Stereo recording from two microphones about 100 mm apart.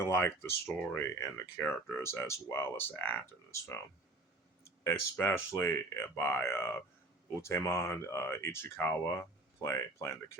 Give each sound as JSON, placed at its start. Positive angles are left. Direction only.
{"t": 0.0, "sound": "speech", "side_deg": 25}